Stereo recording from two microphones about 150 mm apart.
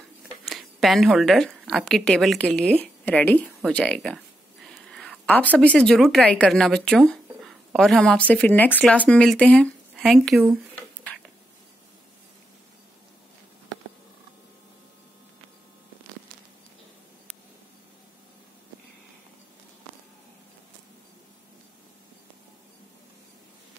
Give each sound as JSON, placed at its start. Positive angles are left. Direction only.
{"t": 0.5, "sound": "a woman's voice", "side_deg": 0}
{"t": 4.8, "sound": "a sound", "side_deg": 5}
{"t": 5.6, "sound": "speech", "side_deg": 5}